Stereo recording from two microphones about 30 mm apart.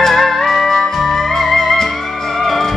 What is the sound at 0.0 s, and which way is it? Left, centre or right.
Music, centre.